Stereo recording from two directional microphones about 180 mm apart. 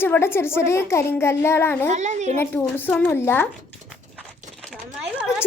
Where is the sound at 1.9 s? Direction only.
40° right (ahead or behind).